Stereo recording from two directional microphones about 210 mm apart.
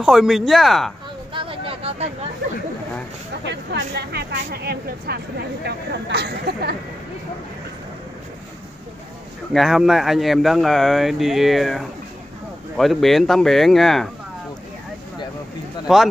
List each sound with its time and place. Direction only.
0.0 s speech: centre (ahead or behind)
1.3 s vehicle: 25° right (ahead or behind)
3.4 s speech: 55° right (ahead or behind)
9.5 s speech: centre (ahead or behind)
15.9 s speech: centre (ahead or behind)